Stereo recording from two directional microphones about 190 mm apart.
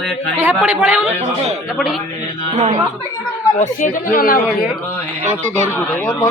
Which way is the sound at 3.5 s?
40° left (ahead or behind).